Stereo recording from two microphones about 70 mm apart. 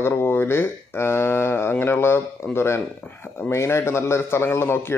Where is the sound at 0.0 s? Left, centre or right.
Left.